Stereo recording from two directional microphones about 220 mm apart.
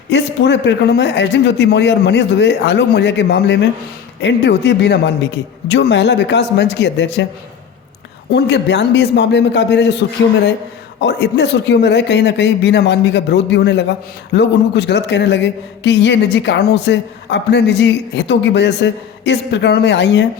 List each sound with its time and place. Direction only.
0.1 s speech: 50° left (ahead or behind)
8.3 s speech: 50° left (ahead or behind)
11.0 s speech: 50° left (ahead or behind)